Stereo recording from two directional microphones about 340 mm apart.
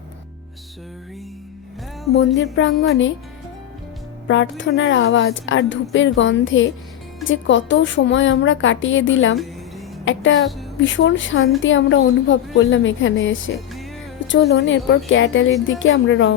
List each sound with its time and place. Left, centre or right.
2.1 s a woman's voice: left
4.3 s a woman's voice: left
14.2 s a sound: left
14.5 s a woman's voice: left